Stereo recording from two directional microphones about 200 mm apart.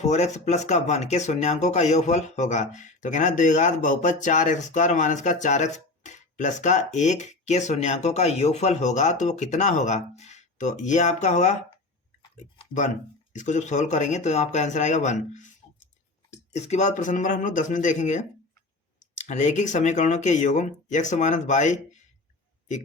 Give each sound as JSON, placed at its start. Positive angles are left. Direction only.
{"t": 0.0, "sound": "speech", "side_deg": 35}
{"t": 12.7, "sound": "speech", "side_deg": 25}
{"t": 13.3, "sound": "speech", "side_deg": 35}